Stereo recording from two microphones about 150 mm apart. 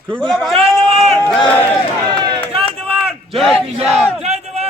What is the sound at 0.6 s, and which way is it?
Speech, 40° right (ahead or behind).